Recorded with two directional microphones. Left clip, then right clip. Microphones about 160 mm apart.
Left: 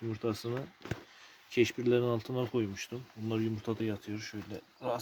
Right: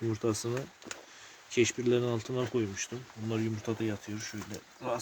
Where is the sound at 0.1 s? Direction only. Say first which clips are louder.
Right 1 dB; 10° left (ahead or behind).